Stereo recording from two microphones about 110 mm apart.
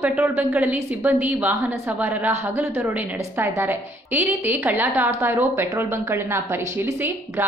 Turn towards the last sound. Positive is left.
turn(degrees=-20)  # may be behind; listen again after turning